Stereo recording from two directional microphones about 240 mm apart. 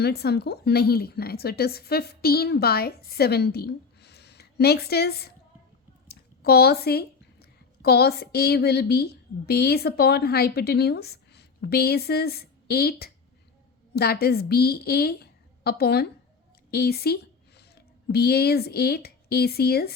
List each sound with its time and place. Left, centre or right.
0.0 s a woman's voice: left
16.7 s a sound: left
18.1 s a woman's voice: left